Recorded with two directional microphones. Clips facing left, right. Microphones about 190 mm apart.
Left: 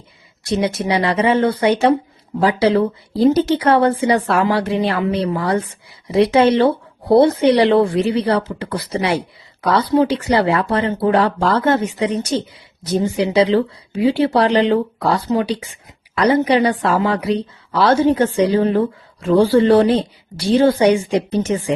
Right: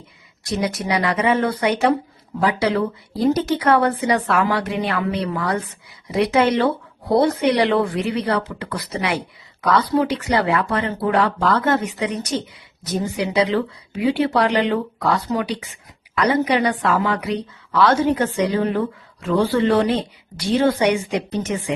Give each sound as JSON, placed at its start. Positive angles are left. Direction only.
{"t": 0.4, "sound": "speech", "side_deg": 25}